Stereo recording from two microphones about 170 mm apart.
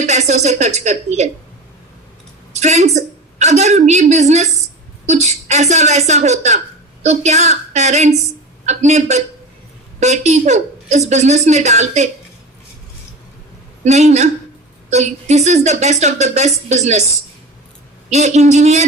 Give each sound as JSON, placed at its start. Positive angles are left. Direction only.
{"t": 0.0, "sound": "a woman's voice", "side_deg": -40}
{"t": 2.5, "sound": "a woman's voice", "side_deg": -40}
{"t": 13.8, "sound": "a woman's voice", "side_deg": -40}
{"t": 18.1, "sound": "a woman's voice", "side_deg": -40}